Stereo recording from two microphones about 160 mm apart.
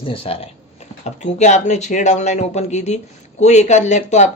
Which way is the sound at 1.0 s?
45° left (ahead or behind).